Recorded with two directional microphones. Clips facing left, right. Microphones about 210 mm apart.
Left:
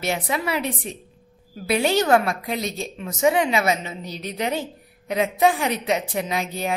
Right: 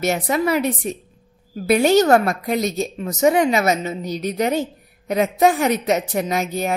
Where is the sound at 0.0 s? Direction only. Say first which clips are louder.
Right 6 dB; 45° right (ahead or behind).